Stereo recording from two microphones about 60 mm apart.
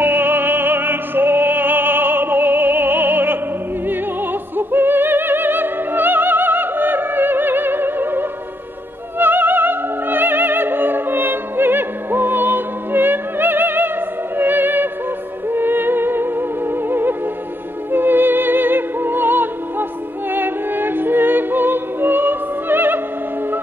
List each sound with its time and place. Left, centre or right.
0.0 s music: right
3.8 s opera: right
15.5 s music: right